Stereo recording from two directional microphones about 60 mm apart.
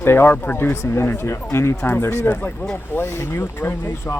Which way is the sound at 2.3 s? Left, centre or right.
Left.